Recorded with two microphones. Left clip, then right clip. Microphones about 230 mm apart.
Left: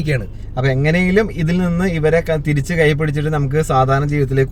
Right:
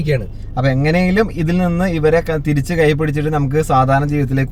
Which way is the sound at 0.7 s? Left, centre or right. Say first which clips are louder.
Right 1 dB; centre.